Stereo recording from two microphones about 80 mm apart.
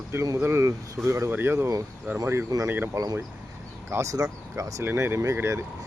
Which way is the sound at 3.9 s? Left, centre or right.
Right.